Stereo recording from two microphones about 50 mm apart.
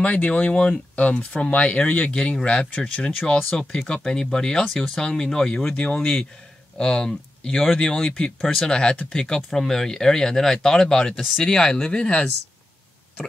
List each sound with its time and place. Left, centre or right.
0.0 s speech: left